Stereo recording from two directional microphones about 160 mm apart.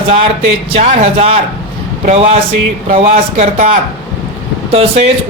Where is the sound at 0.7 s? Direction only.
40° right (ahead or behind).